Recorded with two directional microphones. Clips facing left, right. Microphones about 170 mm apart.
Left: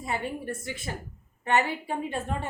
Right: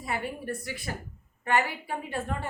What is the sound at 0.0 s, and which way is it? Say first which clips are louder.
A woman's voice: left 1 dB; 20° left (ahead or behind).